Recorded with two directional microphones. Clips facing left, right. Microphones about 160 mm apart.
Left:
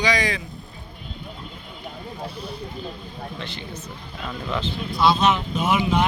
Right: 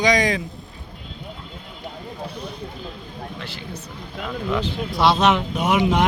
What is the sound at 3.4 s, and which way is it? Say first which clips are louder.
Speech: even; 5° right (ahead or behind).